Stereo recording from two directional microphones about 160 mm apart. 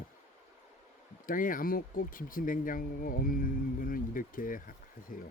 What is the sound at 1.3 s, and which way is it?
Speech, 60° left (ahead or behind).